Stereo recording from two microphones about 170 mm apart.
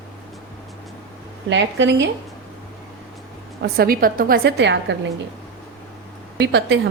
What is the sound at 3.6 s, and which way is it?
A woman's voice, 60° right (ahead or behind).